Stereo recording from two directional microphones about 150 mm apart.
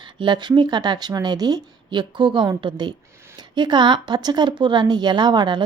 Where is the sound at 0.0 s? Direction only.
30° right (ahead or behind).